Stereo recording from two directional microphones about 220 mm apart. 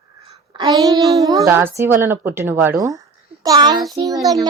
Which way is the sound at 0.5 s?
15° right (ahead or behind).